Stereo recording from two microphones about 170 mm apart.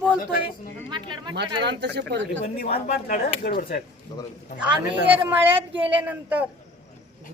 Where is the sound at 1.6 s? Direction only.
90° right.